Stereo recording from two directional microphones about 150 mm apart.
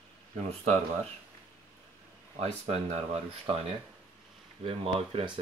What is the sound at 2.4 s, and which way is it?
Speech, 45° right (ahead or behind).